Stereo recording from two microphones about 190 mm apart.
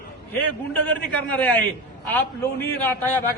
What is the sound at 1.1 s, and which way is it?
A man's voice, 5° left (ahead or behind).